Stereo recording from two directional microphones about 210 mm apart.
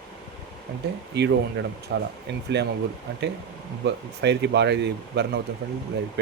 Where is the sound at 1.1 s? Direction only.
55° right (ahead or behind).